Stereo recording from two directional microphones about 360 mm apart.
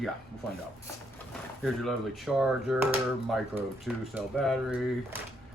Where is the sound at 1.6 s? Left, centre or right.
Centre.